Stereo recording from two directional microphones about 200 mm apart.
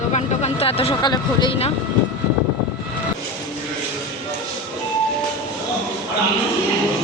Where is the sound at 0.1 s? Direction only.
30° left (ahead or behind).